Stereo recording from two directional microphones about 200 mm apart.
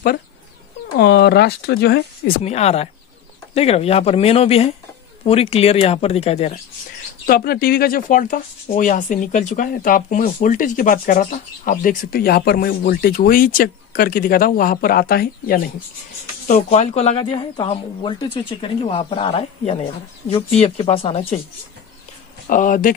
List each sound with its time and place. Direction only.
0.9 s speech: 55° left (ahead or behind)
2.4 s speech: 35° left (ahead or behind)
7.2 s speech: 50° left (ahead or behind)
16.4 s speech: 35° left (ahead or behind)
22.5 s speech: 40° left (ahead or behind)